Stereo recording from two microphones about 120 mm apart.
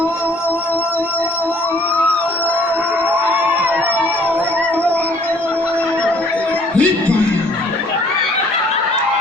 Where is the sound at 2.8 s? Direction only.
15° right (ahead or behind).